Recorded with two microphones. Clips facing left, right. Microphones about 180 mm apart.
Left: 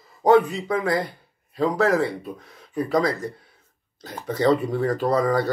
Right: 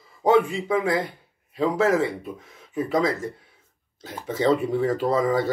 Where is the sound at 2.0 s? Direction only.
20° right (ahead or behind).